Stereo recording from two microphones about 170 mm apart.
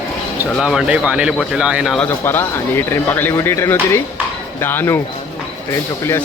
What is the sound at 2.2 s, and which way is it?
Speech, 15° left (ahead or behind).